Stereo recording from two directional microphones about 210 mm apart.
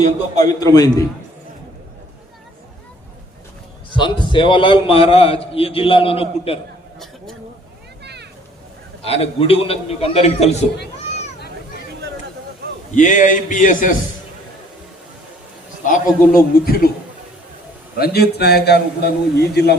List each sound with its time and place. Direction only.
0.4 s a man's voice: 15° left (ahead or behind)
3.9 s a man's voice: 25° left (ahead or behind)
8.0 s a sound: 55° right (ahead or behind)
9.0 s a man's voice: 30° left (ahead or behind)
12.9 s a man's voice: 35° left (ahead or behind)
15.9 s a man's voice: 45° left (ahead or behind)
17.9 s a man's voice: 50° left (ahead or behind)